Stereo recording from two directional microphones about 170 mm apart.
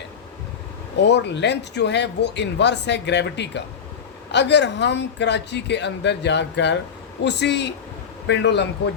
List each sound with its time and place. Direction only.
1.0 s a man's voice: 90° left